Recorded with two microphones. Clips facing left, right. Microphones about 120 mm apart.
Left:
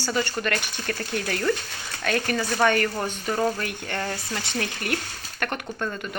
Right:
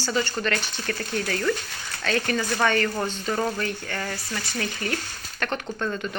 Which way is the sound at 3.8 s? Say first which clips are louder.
Left 2 dB; 20° left (ahead or behind).